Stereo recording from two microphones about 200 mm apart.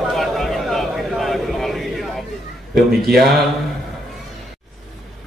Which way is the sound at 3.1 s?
Centre (ahead or behind).